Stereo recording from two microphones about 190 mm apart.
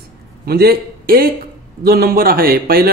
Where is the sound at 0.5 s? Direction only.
55° right (ahead or behind).